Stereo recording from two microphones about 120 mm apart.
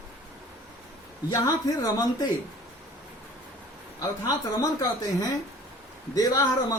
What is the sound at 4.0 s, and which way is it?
Speech, 30° left (ahead or behind).